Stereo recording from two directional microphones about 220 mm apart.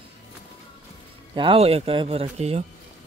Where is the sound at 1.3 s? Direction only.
25° right (ahead or behind).